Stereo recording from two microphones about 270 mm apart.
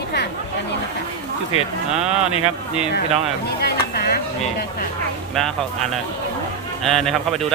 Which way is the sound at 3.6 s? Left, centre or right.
Left.